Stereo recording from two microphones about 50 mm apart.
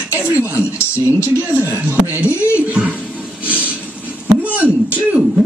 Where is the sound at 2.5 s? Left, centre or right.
Right.